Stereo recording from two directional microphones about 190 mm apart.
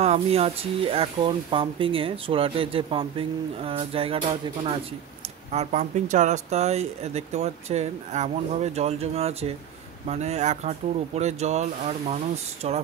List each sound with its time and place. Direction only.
0.0 s speech: 35° right (ahead or behind)